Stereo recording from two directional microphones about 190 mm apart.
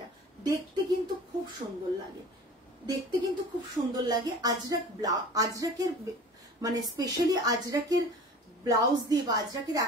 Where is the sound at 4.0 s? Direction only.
20° right (ahead or behind).